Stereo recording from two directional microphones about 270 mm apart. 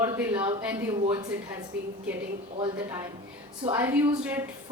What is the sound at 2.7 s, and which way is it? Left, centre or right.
A woman's voice, centre.